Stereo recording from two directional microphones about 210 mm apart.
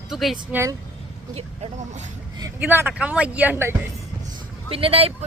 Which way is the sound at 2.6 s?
10° right (ahead or behind).